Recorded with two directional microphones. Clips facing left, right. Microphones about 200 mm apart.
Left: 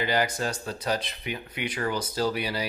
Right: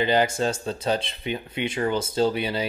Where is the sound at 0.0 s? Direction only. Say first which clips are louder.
Right 5 dB; 25° right (ahead or behind).